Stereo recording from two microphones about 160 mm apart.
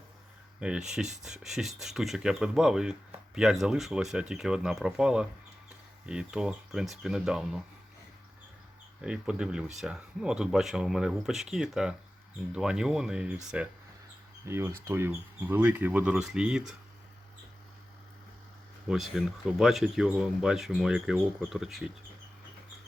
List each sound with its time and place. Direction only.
0.6 s speech: 5° right (ahead or behind)
9.0 s speech: 5° right (ahead or behind)
14.4 s speech: 15° right (ahead or behind)
18.9 s speech: centre (ahead or behind)